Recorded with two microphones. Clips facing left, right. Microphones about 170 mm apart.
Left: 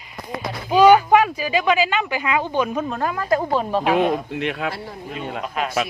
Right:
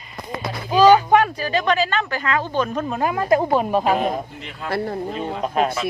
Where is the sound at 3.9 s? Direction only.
75° left (ahead or behind).